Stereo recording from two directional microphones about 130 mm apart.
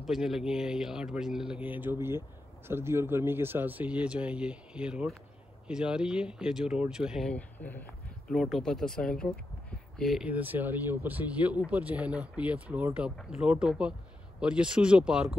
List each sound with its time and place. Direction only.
0.0 s speech: centre (ahead or behind)
7.2 s speech: 10° left (ahead or behind)
8.3 s speech: centre (ahead or behind)
10.2 s speech: 15° right (ahead or behind)